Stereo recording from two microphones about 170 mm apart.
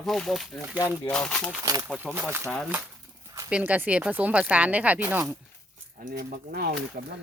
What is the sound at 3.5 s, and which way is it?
Speech, 10° right (ahead or behind).